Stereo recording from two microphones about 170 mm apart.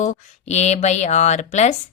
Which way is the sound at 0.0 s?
45° left (ahead or behind).